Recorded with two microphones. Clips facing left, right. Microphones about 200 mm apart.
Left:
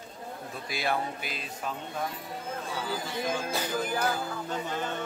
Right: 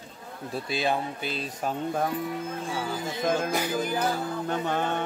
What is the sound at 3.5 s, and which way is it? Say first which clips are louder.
Music: right 3 dB; 15° right (ahead or behind).